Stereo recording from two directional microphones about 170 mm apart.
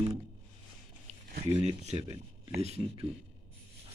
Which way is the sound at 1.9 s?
25° right (ahead or behind).